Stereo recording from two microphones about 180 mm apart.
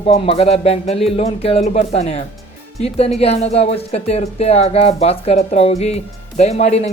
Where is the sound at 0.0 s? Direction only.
35° left (ahead or behind).